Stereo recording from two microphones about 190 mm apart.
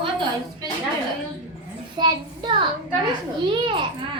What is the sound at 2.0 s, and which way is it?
A child's voice, 25° right (ahead or behind).